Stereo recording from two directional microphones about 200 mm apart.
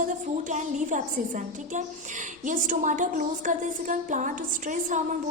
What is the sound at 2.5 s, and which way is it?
A woman's voice, 40° right (ahead or behind).